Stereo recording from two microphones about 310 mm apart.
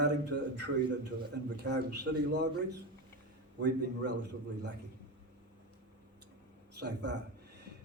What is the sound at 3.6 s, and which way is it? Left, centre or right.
Speech, right.